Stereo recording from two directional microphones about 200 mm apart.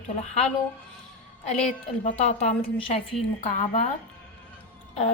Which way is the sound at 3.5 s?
40° left (ahead or behind).